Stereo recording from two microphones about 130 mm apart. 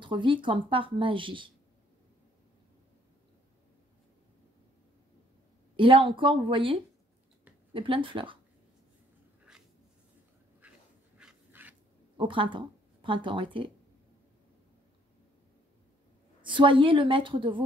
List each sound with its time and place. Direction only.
0.0 s speech: 40° right (ahead or behind)
5.8 s speech: 40° right (ahead or behind)
11.1 s dog: 10° right (ahead or behind)
12.2 s speech: 40° right (ahead or behind)
16.4 s speech: 40° right (ahead or behind)